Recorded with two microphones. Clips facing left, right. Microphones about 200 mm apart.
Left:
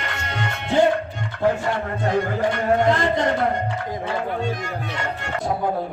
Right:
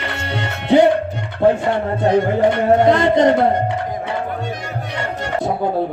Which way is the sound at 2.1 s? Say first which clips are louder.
Right 6 dB; 20° right (ahead or behind).